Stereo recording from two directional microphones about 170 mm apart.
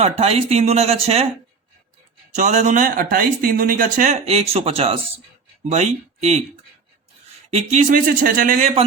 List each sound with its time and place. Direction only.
0.0 s speech: 40° right (ahead or behind)
2.3 s speech: 45° right (ahead or behind)
7.5 s speech: 40° right (ahead or behind)